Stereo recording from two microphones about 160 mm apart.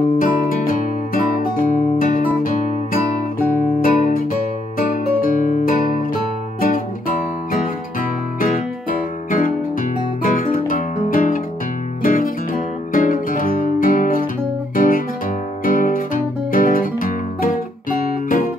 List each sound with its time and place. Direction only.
0.2 s music: 60° left (ahead or behind)
9.3 s music: 60° left (ahead or behind)